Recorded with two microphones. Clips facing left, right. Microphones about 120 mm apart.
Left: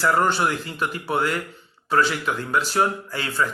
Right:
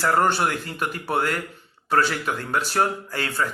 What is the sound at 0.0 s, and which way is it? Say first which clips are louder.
Speech: even; 45° right (ahead or behind).